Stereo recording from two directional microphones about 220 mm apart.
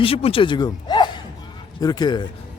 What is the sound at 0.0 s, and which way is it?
Speech, 25° left (ahead or behind).